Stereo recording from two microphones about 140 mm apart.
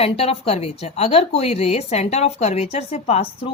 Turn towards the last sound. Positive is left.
turn(degrees=50)  # may be behind; listen again after turning